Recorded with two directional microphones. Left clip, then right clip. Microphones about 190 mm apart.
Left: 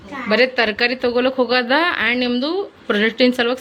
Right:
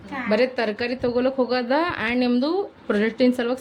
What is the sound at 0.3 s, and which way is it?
A woman's voice, centre (ahead or behind).